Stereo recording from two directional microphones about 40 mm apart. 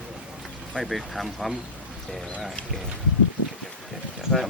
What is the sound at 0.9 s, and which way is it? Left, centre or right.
Speech, centre.